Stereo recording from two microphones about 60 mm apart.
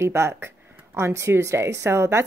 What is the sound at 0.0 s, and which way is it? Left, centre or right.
Speech, right.